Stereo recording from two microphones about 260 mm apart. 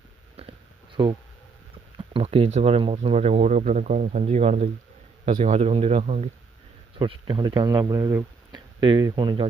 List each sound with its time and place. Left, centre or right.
1.0 s speech: centre